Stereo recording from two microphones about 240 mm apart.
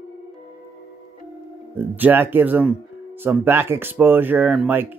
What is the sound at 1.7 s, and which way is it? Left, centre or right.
Speech, centre.